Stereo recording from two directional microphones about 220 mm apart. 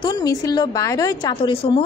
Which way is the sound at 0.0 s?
15° left (ahead or behind).